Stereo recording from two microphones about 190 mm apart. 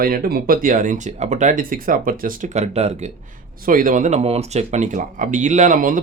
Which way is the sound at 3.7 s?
45° right (ahead or behind).